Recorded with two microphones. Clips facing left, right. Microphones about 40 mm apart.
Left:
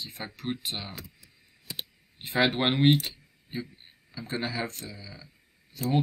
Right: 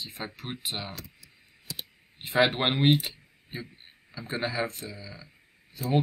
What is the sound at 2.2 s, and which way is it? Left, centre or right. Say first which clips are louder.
Speech: right 1 dB; centre.